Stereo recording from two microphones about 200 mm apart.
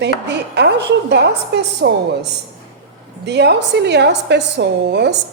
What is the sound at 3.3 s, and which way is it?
A woman's voice, 55° right (ahead or behind).